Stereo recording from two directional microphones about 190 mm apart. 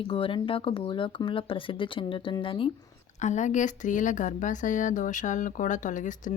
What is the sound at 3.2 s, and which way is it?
Speech, 40° left (ahead or behind).